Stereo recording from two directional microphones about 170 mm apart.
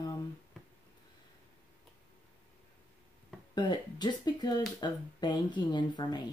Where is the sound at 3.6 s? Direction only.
25° left (ahead or behind).